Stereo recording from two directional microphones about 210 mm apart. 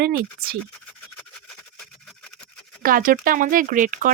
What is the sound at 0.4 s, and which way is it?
Speech, 45° right (ahead or behind).